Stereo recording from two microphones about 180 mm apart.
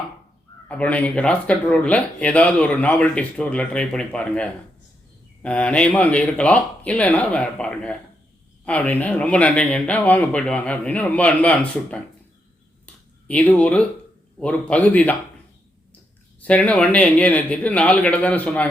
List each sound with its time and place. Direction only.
0.7 s speech: 10° left (ahead or behind)
12.8 s a sound: 5° left (ahead or behind)
14.3 s speech: 5° left (ahead or behind)
16.4 s speech: 10° left (ahead or behind)